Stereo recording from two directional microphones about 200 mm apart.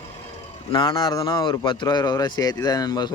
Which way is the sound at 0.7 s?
25° left (ahead or behind).